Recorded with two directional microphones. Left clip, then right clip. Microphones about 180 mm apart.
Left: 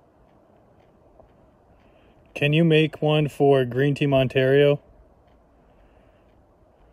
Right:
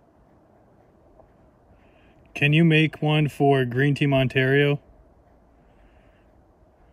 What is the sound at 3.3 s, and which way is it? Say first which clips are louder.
Speech: left 1 dB; 25° left (ahead or behind).